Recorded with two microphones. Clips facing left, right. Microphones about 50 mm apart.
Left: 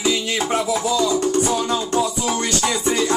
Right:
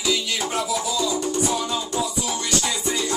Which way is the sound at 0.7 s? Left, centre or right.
Left.